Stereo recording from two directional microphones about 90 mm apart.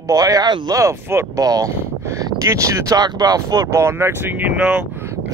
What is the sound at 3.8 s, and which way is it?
Speech, 25° right (ahead or behind).